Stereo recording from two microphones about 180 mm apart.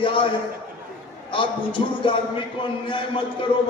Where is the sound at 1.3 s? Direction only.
30° left (ahead or behind).